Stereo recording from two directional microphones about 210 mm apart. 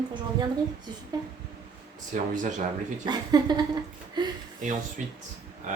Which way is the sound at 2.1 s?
35° right (ahead or behind).